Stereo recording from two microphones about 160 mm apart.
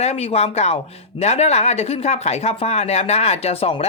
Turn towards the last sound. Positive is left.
turn(degrees=40)  # may be behind; listen again after turning